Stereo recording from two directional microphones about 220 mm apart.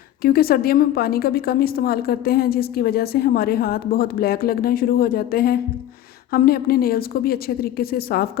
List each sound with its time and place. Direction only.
0.2 s a woman's voice: 45° left (ahead or behind)